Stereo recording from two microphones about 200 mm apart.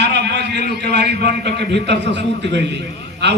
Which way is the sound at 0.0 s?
60° right (ahead or behind).